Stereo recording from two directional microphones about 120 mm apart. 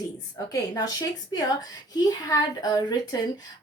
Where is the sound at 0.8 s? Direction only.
30° left (ahead or behind).